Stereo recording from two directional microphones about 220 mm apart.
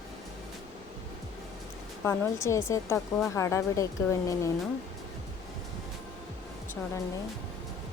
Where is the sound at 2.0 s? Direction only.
10° left (ahead or behind).